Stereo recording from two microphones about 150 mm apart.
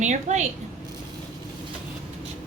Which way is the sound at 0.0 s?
50° right (ahead or behind).